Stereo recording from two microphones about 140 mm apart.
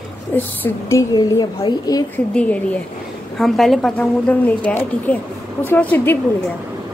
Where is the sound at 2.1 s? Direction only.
10° left (ahead or behind).